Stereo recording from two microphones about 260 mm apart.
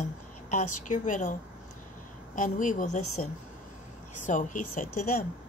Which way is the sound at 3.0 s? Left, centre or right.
Left.